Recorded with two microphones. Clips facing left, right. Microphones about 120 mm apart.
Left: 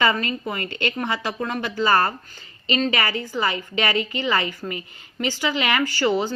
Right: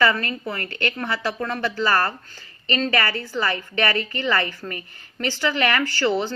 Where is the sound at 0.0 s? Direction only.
20° left (ahead or behind).